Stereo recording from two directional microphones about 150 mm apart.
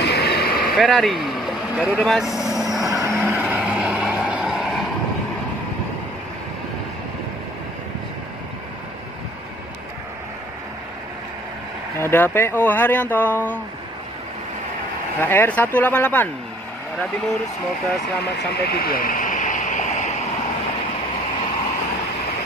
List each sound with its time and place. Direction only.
0.0 s a sound: 90° left
0.7 s a man's voice: centre (ahead or behind)
2.0 s vehicle: centre (ahead or behind)
3.0 s vehicle: 15° right (ahead or behind)
12.0 s speech: 15° left (ahead or behind)
15.1 s speech: 10° left (ahead or behind)
18.5 s a sound: 90° left; by 20.1 s 55° left (ahead or behind)